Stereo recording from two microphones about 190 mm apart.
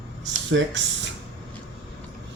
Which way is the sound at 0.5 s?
75° right (ahead or behind).